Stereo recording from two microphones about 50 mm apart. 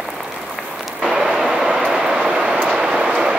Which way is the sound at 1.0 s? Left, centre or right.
Centre.